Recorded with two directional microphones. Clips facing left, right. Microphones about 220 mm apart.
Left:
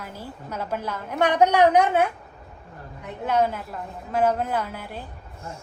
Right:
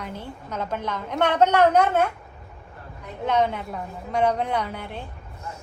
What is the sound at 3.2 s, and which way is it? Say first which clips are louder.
A woman's voice: even; 5° left (ahead or behind).